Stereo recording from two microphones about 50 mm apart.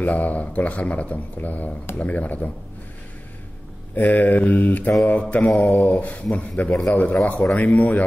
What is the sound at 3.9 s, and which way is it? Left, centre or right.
A man's voice, left.